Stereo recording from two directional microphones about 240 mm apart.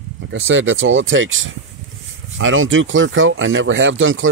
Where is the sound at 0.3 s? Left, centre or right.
Right.